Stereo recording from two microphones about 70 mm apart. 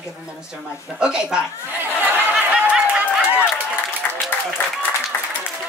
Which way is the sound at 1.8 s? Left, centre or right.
Right.